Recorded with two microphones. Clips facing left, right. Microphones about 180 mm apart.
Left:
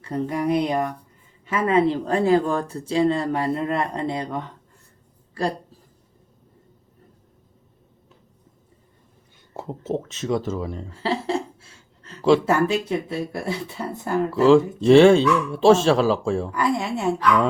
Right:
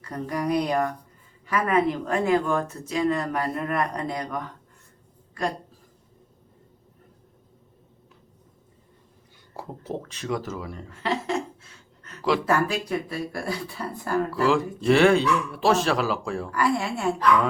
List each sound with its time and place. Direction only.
0.0 s a woman's voice: 25° left (ahead or behind)
9.6 s speech: 25° left (ahead or behind)